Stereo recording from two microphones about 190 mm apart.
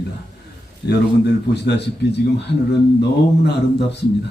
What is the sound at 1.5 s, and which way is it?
Speech, 65° left (ahead or behind).